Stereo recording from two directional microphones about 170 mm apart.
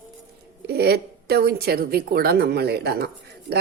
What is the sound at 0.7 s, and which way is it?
Speech, 70° right (ahead or behind).